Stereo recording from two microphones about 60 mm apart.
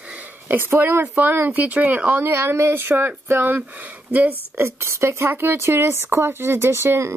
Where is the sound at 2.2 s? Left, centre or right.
Right.